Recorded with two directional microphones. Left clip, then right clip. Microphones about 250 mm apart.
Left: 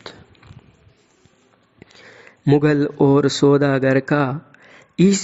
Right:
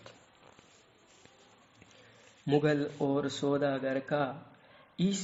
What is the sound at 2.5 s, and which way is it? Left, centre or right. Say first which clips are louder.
Speech: left 12 dB; left.